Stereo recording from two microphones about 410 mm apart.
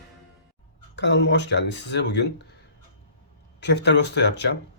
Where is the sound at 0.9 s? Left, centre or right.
Left.